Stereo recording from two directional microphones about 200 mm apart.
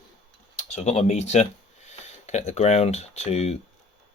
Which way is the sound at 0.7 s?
35° left (ahead or behind).